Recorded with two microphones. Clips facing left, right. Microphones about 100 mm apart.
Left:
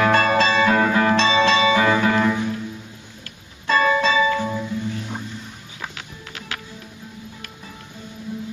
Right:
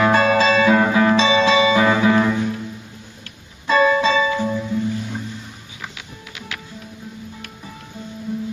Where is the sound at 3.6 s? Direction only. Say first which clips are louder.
Right 3 dB; 5° right (ahead or behind).